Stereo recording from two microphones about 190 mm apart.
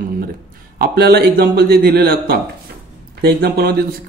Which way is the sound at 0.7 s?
55° right (ahead or behind).